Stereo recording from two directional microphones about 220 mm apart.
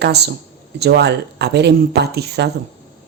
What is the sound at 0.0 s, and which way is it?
A woman's voice, 50° right (ahead or behind).